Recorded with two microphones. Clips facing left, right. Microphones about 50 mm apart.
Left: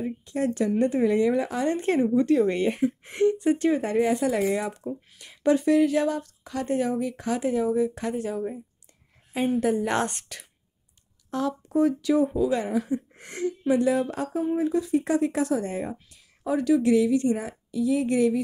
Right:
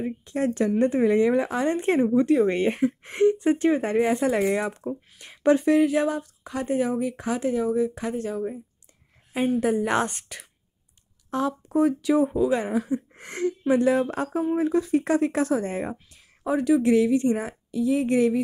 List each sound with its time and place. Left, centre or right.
0.0 s speech: right
5.9 s a woman's voice: centre
7.3 s speech: centre
9.6 s a woman's voice: centre
11.2 s speech: right
13.1 s speech: right
16.4 s speech: right